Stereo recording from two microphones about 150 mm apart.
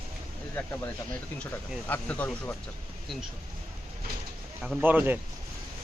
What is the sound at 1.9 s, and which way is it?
Speech, 10° left (ahead or behind).